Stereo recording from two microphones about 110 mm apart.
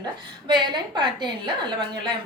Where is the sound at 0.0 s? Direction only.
45° right (ahead or behind).